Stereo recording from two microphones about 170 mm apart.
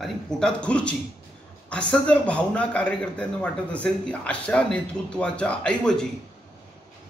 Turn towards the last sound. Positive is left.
turn(degrees=5)  # may be behind; listen again after turning